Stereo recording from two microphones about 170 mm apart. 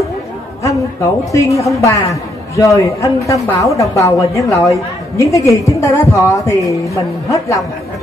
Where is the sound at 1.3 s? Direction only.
20° left (ahead or behind).